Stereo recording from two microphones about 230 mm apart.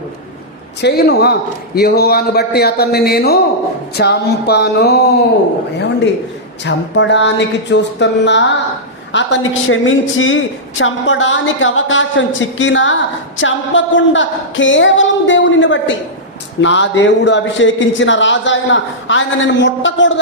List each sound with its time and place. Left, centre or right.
0.8 s a man's voice: left
6.7 s a man's voice: left